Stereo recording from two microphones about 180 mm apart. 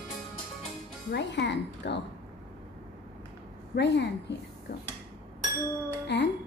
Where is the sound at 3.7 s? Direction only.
75° left (ahead or behind).